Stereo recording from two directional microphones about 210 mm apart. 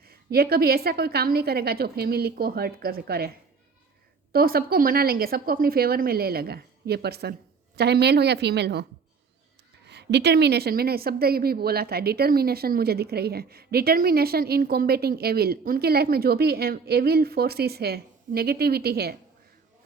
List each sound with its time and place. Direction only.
0.0 s a woman's voice: 45° right (ahead or behind)